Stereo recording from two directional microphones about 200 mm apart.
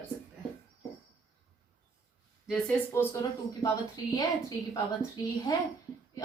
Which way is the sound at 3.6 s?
20° left (ahead or behind).